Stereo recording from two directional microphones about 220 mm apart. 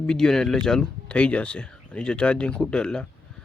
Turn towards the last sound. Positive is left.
turn(degrees=5)  # may be behind; listen again after turning